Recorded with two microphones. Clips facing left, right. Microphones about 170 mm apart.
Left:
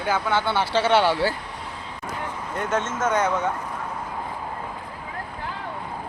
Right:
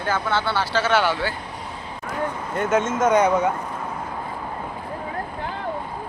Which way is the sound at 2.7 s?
10° right (ahead or behind).